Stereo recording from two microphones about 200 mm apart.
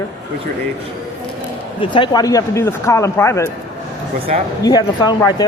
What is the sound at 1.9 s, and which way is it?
Speech, 20° left (ahead or behind).